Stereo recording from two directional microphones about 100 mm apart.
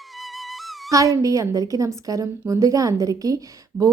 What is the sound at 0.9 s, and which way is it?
A woman's voice, 35° right (ahead or behind).